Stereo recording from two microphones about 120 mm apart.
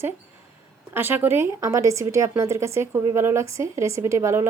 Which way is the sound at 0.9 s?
15° right (ahead or behind).